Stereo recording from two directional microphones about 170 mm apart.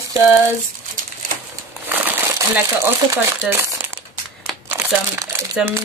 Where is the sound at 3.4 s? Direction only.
10° right (ahead or behind).